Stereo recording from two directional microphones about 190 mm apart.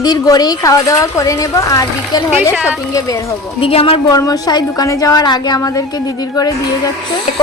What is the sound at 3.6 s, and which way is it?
A woman's voice, 30° left (ahead or behind).